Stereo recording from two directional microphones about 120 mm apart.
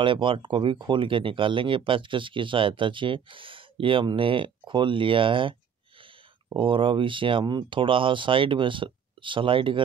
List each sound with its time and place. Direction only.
0.0 s speech: 45° right (ahead or behind)